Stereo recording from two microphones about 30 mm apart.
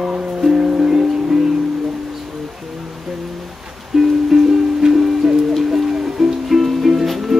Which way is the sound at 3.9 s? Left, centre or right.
Centre.